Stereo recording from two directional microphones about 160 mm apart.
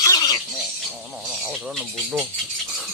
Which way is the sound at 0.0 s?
25° left (ahead or behind).